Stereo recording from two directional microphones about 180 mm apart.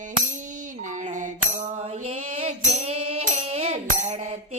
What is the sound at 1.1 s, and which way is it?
Mantra, 45° right (ahead or behind).